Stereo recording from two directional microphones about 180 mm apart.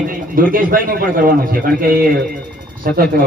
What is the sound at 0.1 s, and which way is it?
A man's voice, 50° right (ahead or behind).